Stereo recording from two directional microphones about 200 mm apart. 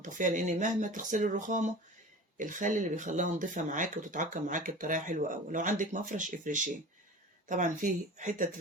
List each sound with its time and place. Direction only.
0.0 s speech: 40° right (ahead or behind)